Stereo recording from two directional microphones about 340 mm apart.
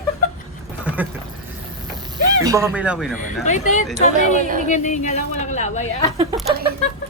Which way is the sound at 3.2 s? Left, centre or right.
Left.